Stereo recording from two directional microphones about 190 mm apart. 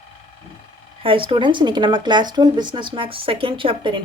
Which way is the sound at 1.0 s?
25° right (ahead or behind).